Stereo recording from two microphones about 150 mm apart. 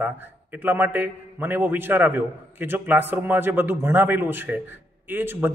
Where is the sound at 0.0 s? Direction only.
10° right (ahead or behind).